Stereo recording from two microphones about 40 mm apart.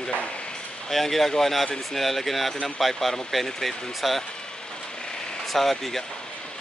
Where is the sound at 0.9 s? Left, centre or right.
Centre.